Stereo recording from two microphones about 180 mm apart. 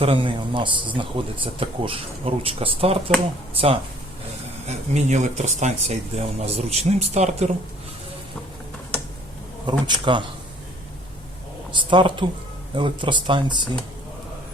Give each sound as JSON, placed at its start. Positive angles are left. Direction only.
{"t": 0.0, "sound": "speech", "side_deg": -30}
{"t": 9.6, "sound": "speech", "side_deg": -25}
{"t": 11.7, "sound": "speech", "side_deg": -25}